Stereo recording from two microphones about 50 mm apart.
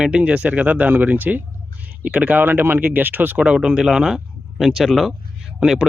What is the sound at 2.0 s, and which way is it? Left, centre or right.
Speech, right.